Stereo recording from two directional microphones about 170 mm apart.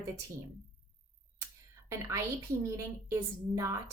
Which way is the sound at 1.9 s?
15° right (ahead or behind).